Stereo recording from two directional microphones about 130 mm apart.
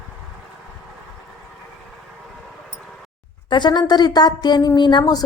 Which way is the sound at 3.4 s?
35° left (ahead or behind).